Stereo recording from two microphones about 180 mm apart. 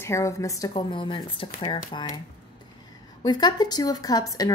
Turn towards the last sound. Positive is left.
turn(degrees=20)  # may be behind; listen again after turning